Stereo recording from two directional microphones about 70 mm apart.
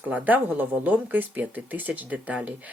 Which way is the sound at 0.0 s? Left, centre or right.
Right.